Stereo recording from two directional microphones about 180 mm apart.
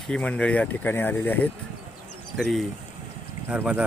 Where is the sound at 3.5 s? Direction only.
5° right (ahead or behind).